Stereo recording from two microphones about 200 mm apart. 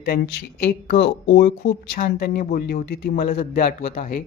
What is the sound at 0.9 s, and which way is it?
A woman's voice, 60° left (ahead or behind).